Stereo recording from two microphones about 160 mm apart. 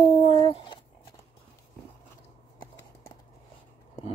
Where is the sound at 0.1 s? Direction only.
35° left (ahead or behind).